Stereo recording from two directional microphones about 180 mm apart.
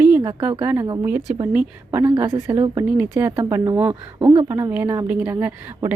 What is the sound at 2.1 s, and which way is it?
Speech, 30° right (ahead or behind).